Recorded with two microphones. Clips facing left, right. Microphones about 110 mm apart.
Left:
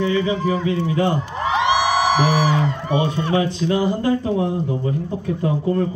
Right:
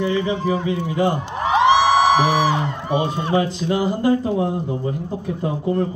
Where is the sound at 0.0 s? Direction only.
10° right (ahead or behind).